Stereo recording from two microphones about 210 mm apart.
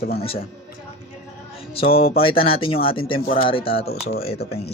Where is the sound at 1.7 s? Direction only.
25° left (ahead or behind).